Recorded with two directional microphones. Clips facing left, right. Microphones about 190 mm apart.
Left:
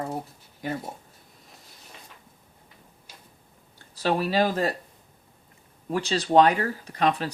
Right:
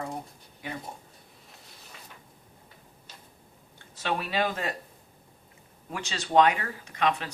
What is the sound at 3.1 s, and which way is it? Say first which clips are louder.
Tick-tock: even; 10° left (ahead or behind).